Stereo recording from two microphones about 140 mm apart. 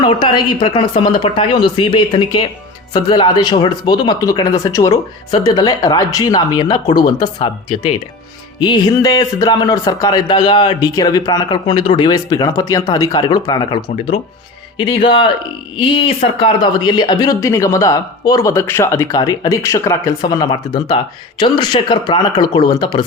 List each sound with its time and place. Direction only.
0.0 s speech: 35° left (ahead or behind)
11.6 s speech: 40° left (ahead or behind)